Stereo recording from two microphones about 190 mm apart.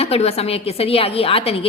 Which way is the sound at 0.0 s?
35° left (ahead or behind).